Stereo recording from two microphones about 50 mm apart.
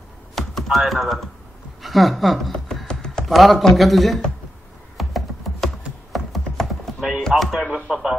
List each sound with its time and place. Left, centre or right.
0.4 s typing: centre
1.8 s speech: centre
2.9 s music: centre
3.3 s a man's voice: centre
4.9 s computer keyboard: centre
6.1 s music: centre
7.0 s chopping: centre
7.3 s a man's voice: centre
7.7 s music: centre